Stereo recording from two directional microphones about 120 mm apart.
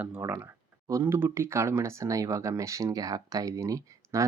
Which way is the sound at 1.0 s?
20° right (ahead or behind).